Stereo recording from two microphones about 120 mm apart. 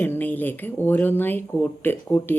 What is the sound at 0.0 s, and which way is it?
A woman's voice, 15° left (ahead or behind).